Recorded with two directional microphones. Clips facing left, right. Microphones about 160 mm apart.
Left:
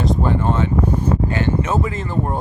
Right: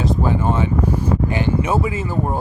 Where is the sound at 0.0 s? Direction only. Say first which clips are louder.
Even; 5° right (ahead or behind).